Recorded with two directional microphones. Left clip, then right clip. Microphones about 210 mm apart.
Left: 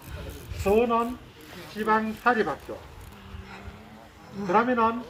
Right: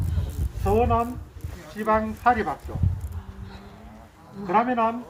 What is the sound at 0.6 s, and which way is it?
Speech, 25° right (ahead or behind).